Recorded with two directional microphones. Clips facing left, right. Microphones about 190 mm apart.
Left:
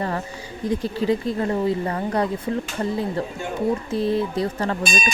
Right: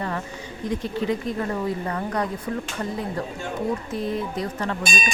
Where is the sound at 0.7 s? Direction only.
35° left (ahead or behind).